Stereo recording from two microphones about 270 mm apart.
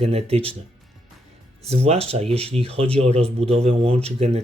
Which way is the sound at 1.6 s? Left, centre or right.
Right.